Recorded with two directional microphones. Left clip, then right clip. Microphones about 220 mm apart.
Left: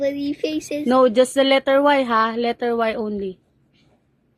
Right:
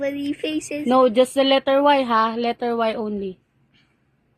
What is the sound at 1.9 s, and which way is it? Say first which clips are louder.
A woman's voice: even; 25° right (ahead or behind).